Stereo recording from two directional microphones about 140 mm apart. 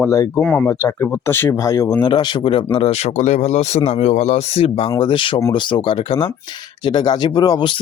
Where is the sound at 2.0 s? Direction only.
35° left (ahead or behind); by 4.7 s 50° left (ahead or behind).